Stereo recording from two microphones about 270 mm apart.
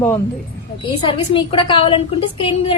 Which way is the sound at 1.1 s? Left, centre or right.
Centre.